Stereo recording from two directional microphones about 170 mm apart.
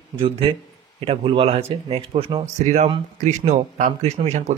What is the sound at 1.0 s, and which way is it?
Speech, 35° right (ahead or behind).